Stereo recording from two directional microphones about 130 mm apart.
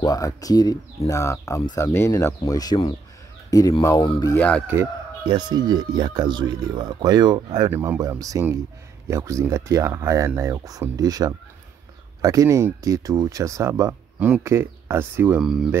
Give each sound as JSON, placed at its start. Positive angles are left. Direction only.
{"t": 0.0, "sound": "speech", "side_deg": 25}
{"t": 4.0, "sound": "speech", "side_deg": 40}
{"t": 4.4, "sound": "speech", "side_deg": 10}
{"t": 5.2, "sound": "speech", "side_deg": -35}
{"t": 7.7, "sound": "speech", "side_deg": -20}
{"t": 15.3, "sound": "speech", "side_deg": -5}